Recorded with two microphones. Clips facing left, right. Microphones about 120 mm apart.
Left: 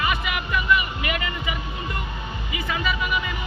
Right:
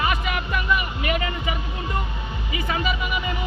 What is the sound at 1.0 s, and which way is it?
Speech, 40° right (ahead or behind).